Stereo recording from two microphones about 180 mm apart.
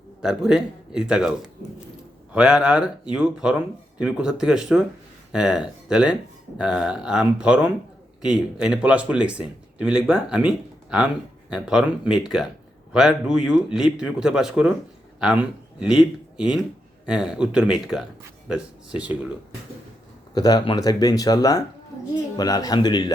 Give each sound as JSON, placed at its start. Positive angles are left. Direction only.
{"t": 0.2, "sound": "speech", "side_deg": -5}
{"t": 20.3, "sound": "speech", "side_deg": 20}